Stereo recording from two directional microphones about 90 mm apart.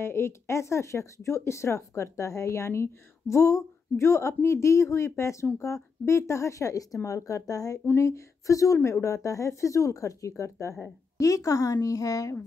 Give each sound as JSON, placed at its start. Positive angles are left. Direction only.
{"t": 0.0, "sound": "speech", "side_deg": 30}